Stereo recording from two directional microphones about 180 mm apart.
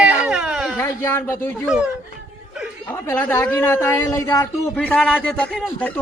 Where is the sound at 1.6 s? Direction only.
5° right (ahead or behind).